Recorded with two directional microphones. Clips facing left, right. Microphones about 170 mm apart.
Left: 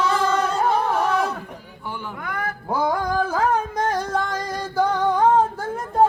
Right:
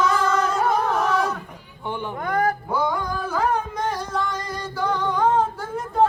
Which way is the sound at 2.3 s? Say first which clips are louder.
Right 8 dB; 40° right (ahead or behind).